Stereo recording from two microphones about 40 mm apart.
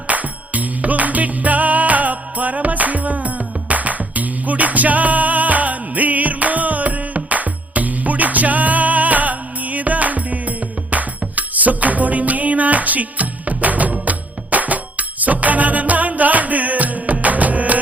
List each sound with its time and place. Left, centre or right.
0.1 s music: right